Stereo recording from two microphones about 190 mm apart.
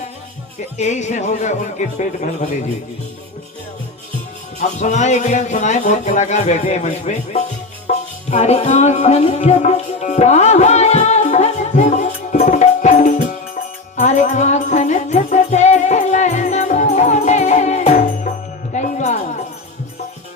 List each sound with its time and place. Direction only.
0.8 s speech: 40° left (ahead or behind)
4.6 s speech: 40° left (ahead or behind)
7.9 s music: 35° left (ahead or behind)